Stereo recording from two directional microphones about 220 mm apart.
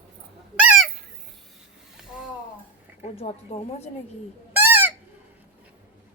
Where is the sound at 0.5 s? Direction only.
5° right (ahead or behind).